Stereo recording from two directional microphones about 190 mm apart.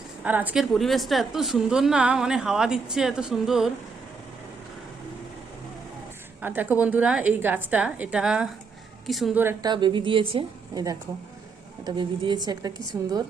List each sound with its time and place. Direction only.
0.3 s a woman's voice: 10° right (ahead or behind)
6.4 s a woman's voice: 10° right (ahead or behind)
9.4 s a woman's voice: 10° right (ahead or behind)
9.7 s a woman's voice: 25° right (ahead or behind)